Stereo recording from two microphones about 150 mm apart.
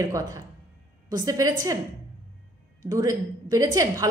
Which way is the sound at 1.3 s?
25° right (ahead or behind).